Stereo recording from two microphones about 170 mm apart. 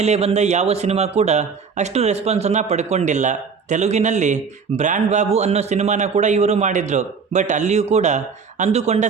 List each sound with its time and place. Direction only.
0.0 s a man's voice: 40° right (ahead or behind)